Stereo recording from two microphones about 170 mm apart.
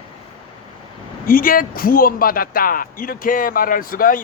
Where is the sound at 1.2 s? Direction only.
60° left (ahead or behind).